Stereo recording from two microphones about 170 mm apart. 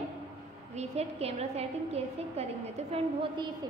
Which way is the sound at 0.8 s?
40° right (ahead or behind).